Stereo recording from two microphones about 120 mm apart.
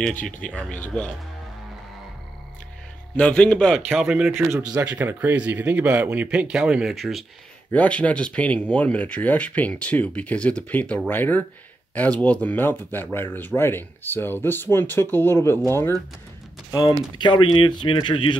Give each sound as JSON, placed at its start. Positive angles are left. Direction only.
{"t": 0.1, "sound": "speech", "side_deg": 90}
{"t": 0.4, "sound": "speech", "side_deg": 10}
{"t": 3.2, "sound": "a man's voice", "side_deg": 10}
{"t": 7.7, "sound": "speech", "side_deg": 10}
{"t": 17.1, "sound": "speech", "side_deg": 40}